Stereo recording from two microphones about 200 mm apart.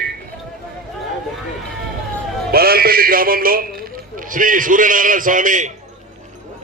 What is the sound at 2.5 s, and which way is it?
Music, 50° right (ahead or behind).